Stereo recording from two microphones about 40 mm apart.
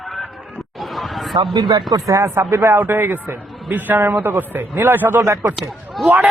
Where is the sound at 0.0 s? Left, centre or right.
Centre.